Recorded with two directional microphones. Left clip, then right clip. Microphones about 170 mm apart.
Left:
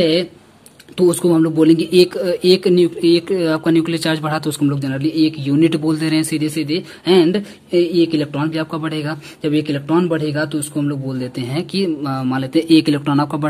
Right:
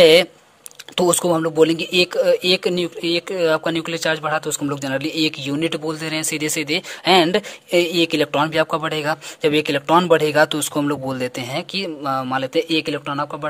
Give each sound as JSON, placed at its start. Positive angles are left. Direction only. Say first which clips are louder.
{"t": 0.0, "sound": "speech", "louder": "right 5 dB", "side_deg": -50}
{"t": 4.6, "sound": "speech", "louder": "left 3 dB", "side_deg": -40}
{"t": 6.4, "sound": "speech", "louder": "left 1 dB", "side_deg": -45}